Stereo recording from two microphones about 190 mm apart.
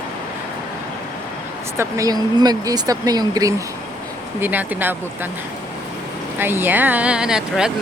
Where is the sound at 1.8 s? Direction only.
20° right (ahead or behind).